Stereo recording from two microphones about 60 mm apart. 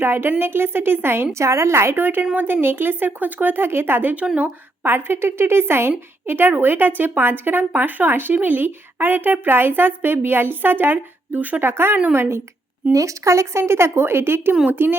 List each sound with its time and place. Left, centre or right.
0.0 s speech: right
11.6 s speech: right
12.9 s speech: right